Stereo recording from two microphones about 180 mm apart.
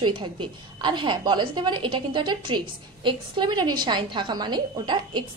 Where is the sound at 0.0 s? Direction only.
25° right (ahead or behind).